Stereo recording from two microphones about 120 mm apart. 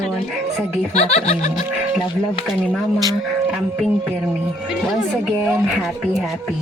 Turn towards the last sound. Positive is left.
turn(degrees=-10)  # may be behind; listen again after turning